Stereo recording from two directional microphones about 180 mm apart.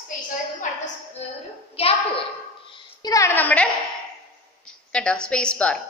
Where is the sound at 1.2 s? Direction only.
40° left (ahead or behind).